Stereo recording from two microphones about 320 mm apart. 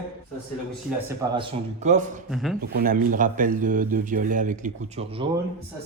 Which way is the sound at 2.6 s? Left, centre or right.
Right.